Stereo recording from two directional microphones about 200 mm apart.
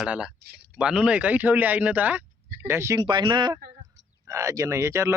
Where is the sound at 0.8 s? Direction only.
5° right (ahead or behind).